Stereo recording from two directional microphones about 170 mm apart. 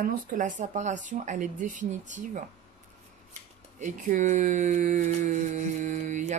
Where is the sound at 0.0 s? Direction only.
50° right (ahead or behind).